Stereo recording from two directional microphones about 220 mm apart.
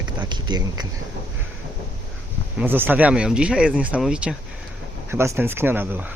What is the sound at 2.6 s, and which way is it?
Speech, 10° right (ahead or behind).